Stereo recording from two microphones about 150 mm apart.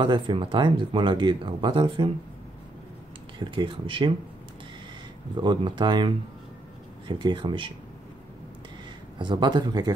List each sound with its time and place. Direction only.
0.0 s speech: 30° right (ahead or behind)
3.3 s speech: 35° right (ahead or behind)
5.3 s speech: 30° right (ahead or behind)
9.2 s speech: 30° right (ahead or behind)